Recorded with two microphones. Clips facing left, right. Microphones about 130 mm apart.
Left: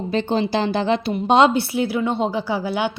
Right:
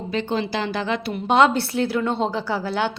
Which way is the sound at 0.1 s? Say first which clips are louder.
Left 4 dB; 30° left (ahead or behind).